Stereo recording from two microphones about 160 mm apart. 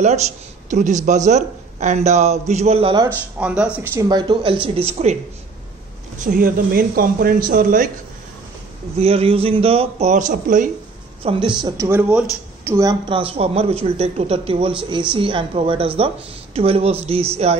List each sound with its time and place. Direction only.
0.0 s a man's voice: 45° right (ahead or behind)
3.3 s speech: 5° right (ahead or behind)
4.2 s a man's voice: 30° right (ahead or behind)
6.1 s speech: 55° right (ahead or behind)
8.9 s a man's voice: 40° right (ahead or behind); by 10.7 s 55° right (ahead or behind)
11.2 s a man's voice: 35° right (ahead or behind)
11.6 s a woman's voice: 20° right (ahead or behind)
13.1 s a man's voice: 35° right (ahead or behind)